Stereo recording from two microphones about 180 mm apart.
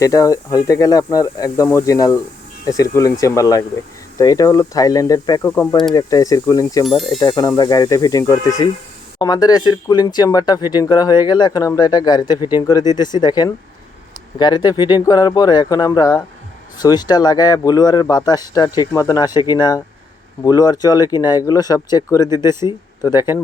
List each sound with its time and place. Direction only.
0.0 s speech: 20° left (ahead or behind)